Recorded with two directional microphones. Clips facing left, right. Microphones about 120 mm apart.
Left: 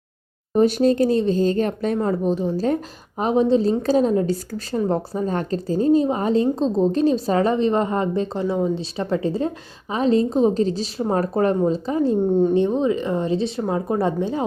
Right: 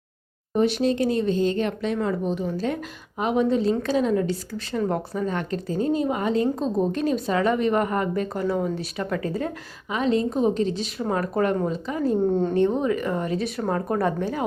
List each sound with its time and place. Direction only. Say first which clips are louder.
0.5 s a woman's voice: left 5 dB; 40° left (ahead or behind)
12.4 s speech: left 3 dB; 15° left (ahead or behind)